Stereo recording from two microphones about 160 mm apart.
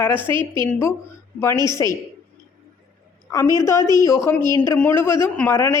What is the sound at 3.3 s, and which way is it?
A woman's voice, 20° left (ahead or behind).